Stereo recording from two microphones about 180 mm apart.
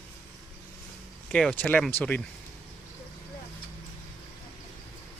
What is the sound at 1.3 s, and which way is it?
Speech, 5° left (ahead or behind).